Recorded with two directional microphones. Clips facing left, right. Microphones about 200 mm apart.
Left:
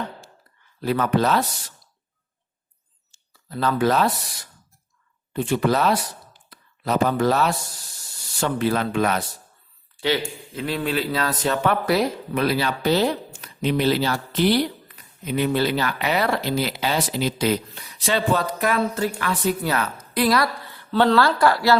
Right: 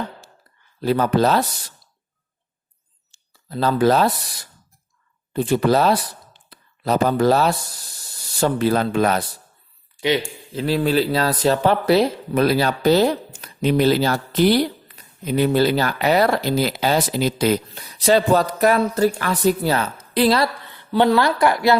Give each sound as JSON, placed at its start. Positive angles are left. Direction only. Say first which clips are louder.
{"t": 0.8, "sound": "speech", "louder": "right 3 dB", "side_deg": -30}
{"t": 3.1, "sound": "a sound", "louder": "right 3 dB", "side_deg": -30}
{"t": 5.3, "sound": "speech", "louder": "right 4 dB", "side_deg": -35}
{"t": 10.5, "sound": "speech", "louder": "right 6 dB", "side_deg": -30}
{"t": 12.4, "sound": "speech", "louder": "right 5 dB", "side_deg": -40}